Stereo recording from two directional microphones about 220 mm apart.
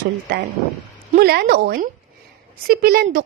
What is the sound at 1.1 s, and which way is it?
A woman's voice, 45° right (ahead or behind).